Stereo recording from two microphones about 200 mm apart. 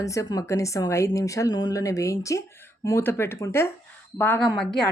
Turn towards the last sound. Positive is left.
turn(degrees=10)  # may be behind; listen again after turning